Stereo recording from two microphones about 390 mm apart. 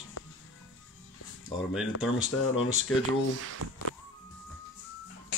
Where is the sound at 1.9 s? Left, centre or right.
Left.